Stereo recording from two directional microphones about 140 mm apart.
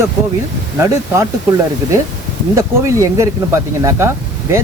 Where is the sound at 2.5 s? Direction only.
20° right (ahead or behind).